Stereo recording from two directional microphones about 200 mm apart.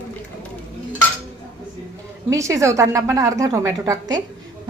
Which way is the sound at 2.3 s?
15° right (ahead or behind).